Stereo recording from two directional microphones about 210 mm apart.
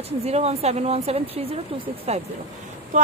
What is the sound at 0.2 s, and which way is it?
A woman's voice, 30° right (ahead or behind).